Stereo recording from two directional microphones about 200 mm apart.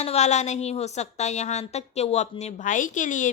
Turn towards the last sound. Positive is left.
turn(degrees=40)  # may be behind; listen again after turning